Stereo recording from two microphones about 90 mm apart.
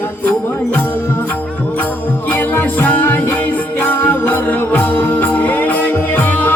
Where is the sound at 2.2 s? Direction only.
25° left (ahead or behind).